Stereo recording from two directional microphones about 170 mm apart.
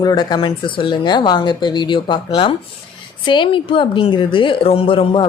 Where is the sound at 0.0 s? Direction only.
25° left (ahead or behind).